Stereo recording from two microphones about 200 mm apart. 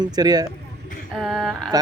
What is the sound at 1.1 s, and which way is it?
Speech, centre (ahead or behind).